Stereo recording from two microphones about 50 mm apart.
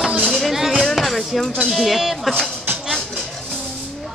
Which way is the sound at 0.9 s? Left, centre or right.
Centre.